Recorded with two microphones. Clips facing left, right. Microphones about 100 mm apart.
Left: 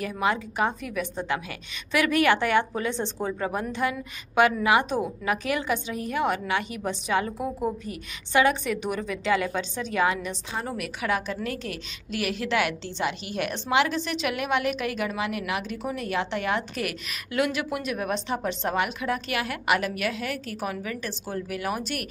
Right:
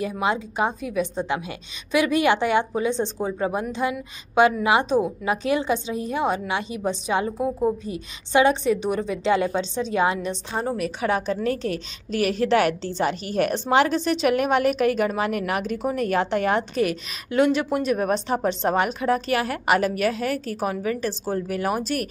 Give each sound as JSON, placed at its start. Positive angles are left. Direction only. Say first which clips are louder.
{"t": 0.0, "sound": "a woman's voice", "louder": "right 2 dB", "side_deg": -20}